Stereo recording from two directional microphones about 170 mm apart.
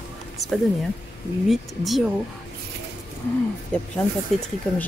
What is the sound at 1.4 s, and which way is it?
Speech, centre (ahead or behind).